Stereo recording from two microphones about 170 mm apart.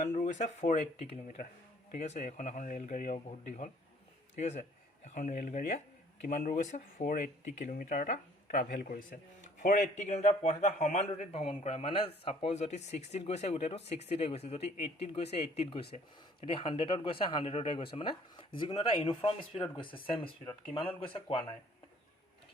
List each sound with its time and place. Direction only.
0.0 s a man's voice: 45° left (ahead or behind); by 20.2 s 30° left (ahead or behind)
20.4 s speech: 15° left (ahead or behind)
20.7 s a man's voice: 30° left (ahead or behind)